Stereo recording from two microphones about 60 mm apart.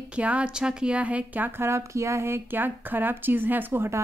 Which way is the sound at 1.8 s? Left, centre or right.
Right.